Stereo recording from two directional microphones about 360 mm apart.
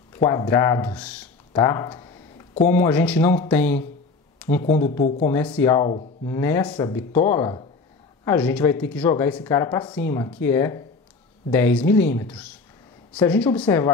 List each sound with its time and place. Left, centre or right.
0.1 s speech: centre
4.4 s a sound: centre
5.0 s speech: centre
5.3 s speech: centre